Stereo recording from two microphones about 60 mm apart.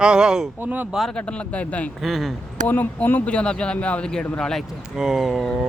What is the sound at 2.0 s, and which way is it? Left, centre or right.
Speech, centre.